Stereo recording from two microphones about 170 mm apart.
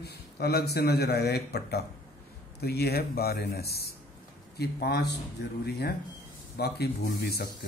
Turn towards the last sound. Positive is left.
turn(degrees=70)  # may be behind; listen again after turning